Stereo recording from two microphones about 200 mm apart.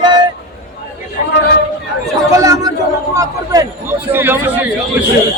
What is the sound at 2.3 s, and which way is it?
A man's voice, 20° right (ahead or behind).